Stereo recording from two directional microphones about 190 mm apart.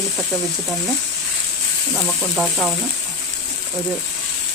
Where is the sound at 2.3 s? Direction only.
Centre (ahead or behind).